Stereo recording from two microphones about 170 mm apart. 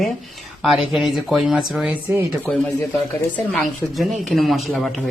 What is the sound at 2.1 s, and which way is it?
Speech, 15° right (ahead or behind).